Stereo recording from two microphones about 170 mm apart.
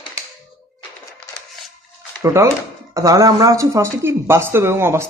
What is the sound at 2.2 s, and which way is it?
Speech, 15° right (ahead or behind).